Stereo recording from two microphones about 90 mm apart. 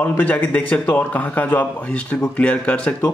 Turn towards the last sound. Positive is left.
turn(degrees=15)  # may be behind; listen again after turning